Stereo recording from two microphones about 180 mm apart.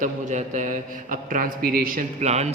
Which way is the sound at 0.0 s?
40° right (ahead or behind).